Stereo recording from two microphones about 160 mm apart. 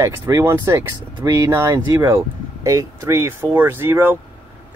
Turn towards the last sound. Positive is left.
turn(degrees=-15)  # may be behind; listen again after turning